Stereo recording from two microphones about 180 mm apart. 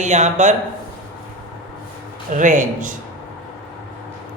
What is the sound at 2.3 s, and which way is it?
Speech, 45° right (ahead or behind).